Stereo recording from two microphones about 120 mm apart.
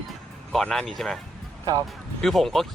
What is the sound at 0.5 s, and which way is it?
Speech, 5° left (ahead or behind).